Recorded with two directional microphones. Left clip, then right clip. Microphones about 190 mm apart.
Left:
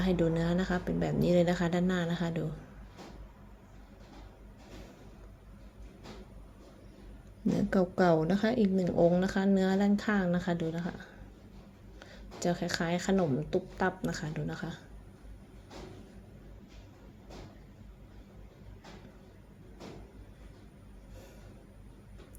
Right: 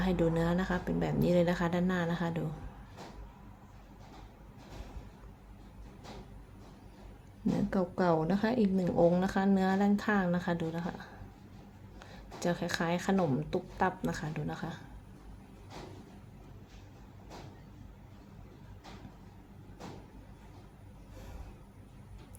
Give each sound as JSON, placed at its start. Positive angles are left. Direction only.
{"t": 0.0, "sound": "speech", "side_deg": 5}
{"t": 7.5, "sound": "speech", "side_deg": 10}